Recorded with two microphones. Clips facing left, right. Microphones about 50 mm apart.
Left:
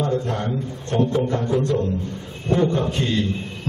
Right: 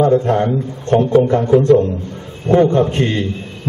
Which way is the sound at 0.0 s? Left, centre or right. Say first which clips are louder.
Right 10 dB; right.